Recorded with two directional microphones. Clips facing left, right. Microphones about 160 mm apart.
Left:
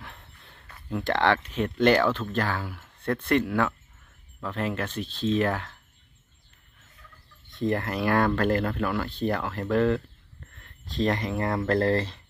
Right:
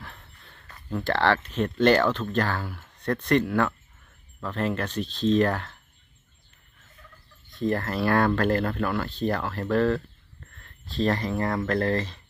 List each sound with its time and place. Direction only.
0.0 s a sound: 15° left (ahead or behind)
1.0 s speech: 15° left (ahead or behind)
7.5 s speech: 20° left (ahead or behind)